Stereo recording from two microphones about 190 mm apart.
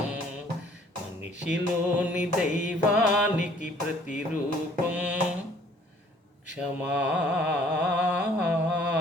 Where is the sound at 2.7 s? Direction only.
5° right (ahead or behind).